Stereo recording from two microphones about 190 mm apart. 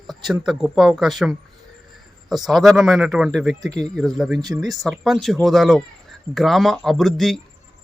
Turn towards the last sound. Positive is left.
turn(degrees=0)  # may be behind; listen again after turning